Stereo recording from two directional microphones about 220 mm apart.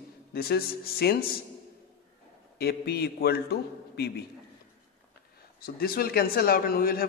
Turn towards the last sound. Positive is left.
turn(degrees=45)  # may be behind; listen again after turning